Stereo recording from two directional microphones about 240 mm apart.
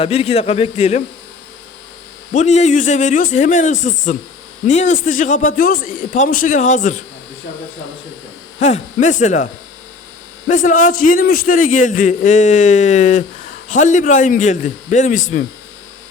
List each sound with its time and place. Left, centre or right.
0.0 s a man's voice: left
2.3 s a man's voice: left
8.5 s a man's voice: left
10.5 s a man's voice: left